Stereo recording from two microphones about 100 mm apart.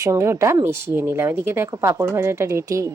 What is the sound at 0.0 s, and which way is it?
Speech, 30° right (ahead or behind).